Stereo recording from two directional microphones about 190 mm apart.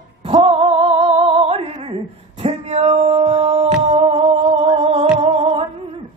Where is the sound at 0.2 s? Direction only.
30° right (ahead or behind).